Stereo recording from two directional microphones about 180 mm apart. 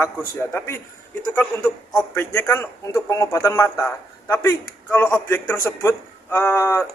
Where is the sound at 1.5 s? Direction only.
15° left (ahead or behind).